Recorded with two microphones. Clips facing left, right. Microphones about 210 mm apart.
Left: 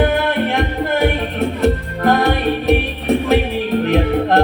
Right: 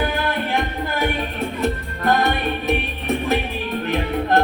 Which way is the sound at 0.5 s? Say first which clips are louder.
Left 5 dB; 65° left (ahead or behind).